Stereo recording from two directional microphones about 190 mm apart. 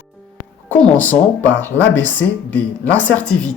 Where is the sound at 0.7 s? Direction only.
10° left (ahead or behind).